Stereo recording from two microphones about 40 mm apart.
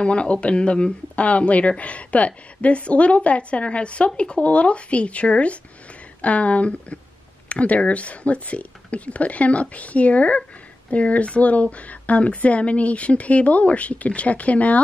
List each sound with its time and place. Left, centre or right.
0.0 s speech: left